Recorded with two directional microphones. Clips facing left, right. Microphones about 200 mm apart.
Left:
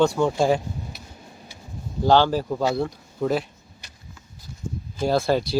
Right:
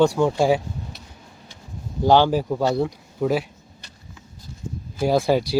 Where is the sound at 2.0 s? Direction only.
15° right (ahead or behind).